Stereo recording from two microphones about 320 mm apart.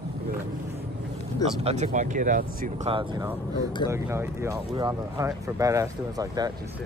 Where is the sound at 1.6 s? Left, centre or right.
Centre.